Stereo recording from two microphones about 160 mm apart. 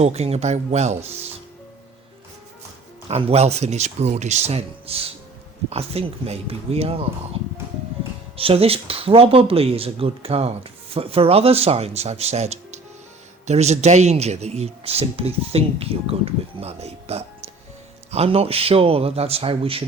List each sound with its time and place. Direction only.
0.0 s speech: 40° right (ahead or behind)
3.1 s speech: 40° right (ahead or behind)
8.4 s speech: 35° right (ahead or behind)